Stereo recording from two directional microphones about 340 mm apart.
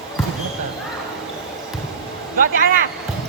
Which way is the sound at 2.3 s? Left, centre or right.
Right.